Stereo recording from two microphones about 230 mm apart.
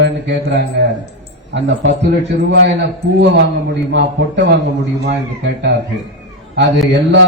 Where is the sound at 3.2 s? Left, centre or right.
Right.